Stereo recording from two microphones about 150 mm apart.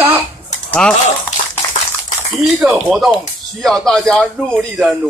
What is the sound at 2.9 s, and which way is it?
Speech, centre (ahead or behind).